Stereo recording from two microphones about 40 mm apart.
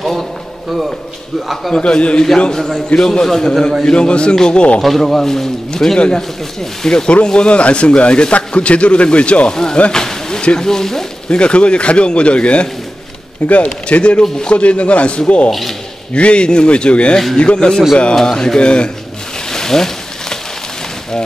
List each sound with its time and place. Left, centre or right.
1.8 s speech: left
4.8 s speech: centre
5.9 s speech: left
6.8 s speech: centre
7.2 s speech: left
9.5 s speech: centre
11.2 s speech: left
19.5 s a sound: centre